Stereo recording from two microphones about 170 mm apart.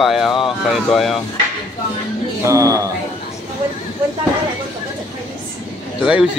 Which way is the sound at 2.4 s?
20° right (ahead or behind).